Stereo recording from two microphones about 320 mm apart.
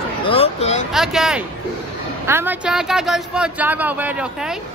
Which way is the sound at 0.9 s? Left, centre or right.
Centre.